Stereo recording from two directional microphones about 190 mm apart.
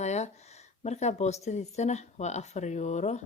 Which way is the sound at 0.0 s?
35° left (ahead or behind).